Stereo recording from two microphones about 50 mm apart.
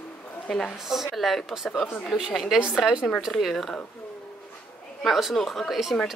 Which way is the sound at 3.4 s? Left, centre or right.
Centre.